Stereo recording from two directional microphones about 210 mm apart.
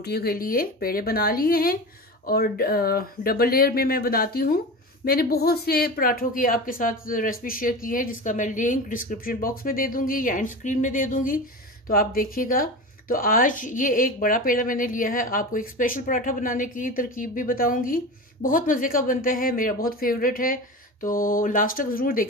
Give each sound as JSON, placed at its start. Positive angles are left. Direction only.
{"t": 0.0, "sound": "a woman's voice", "side_deg": 50}